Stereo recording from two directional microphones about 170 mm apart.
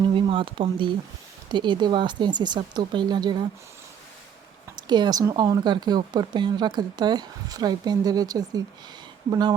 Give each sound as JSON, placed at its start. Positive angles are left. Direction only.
{"t": 0.1, "sound": "speech", "side_deg": -30}
{"t": 4.9, "sound": "speech", "side_deg": -25}